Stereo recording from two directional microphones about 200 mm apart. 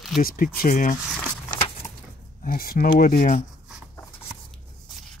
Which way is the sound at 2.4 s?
45° left (ahead or behind).